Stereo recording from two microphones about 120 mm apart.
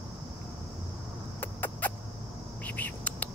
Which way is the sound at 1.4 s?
15° left (ahead or behind).